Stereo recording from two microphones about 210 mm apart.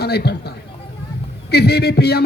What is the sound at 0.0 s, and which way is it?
Speech, 50° left (ahead or behind).